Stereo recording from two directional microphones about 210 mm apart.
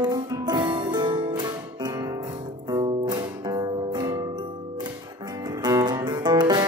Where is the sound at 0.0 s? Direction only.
20° right (ahead or behind).